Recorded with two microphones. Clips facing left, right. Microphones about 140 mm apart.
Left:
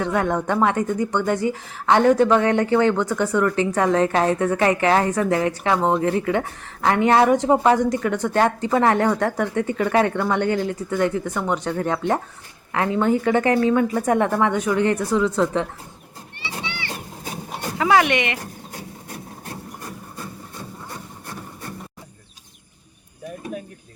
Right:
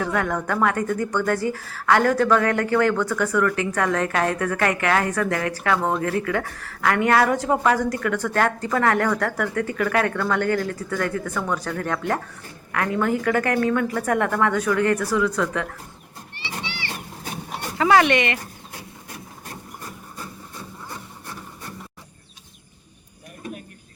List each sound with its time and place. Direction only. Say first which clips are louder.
0.0 s speech: left 3 dB; 25° left (ahead or behind)
17.7 s speech: right 1 dB; 10° left (ahead or behind)